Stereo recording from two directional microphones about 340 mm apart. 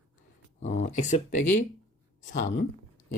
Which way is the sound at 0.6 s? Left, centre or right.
Left.